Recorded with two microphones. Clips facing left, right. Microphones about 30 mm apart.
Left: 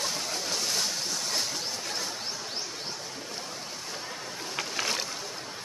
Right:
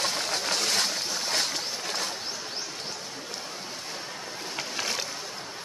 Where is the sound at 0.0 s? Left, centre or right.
Right.